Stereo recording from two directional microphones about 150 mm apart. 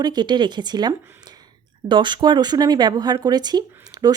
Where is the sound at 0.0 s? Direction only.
30° right (ahead or behind).